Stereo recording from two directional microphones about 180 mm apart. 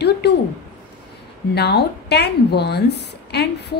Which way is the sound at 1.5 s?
70° left (ahead or behind).